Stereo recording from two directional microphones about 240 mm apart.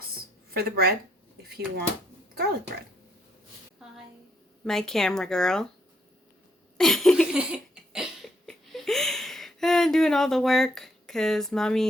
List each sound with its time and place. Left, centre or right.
0.5 s speech: right
4.6 s speech: centre
6.7 s a sound: centre